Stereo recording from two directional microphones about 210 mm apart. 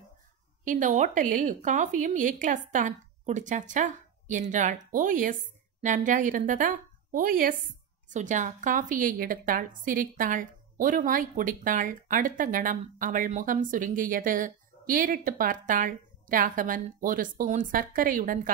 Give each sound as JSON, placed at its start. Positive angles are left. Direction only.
{"t": 0.7, "sound": "a woman's voice", "side_deg": -35}